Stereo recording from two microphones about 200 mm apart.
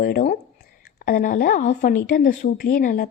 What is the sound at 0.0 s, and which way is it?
A woman's voice, 45° left (ahead or behind).